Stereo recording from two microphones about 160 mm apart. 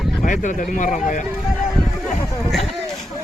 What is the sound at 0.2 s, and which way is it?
Speech, 50° left (ahead or behind).